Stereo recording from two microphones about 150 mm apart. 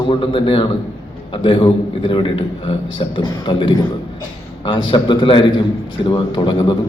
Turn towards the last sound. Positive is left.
turn(degrees=30)  # may be behind; listen again after turning